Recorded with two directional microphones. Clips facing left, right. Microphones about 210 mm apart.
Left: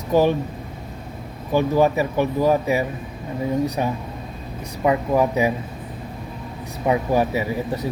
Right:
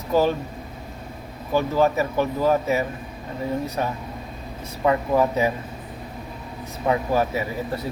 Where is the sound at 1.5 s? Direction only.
15° left (ahead or behind).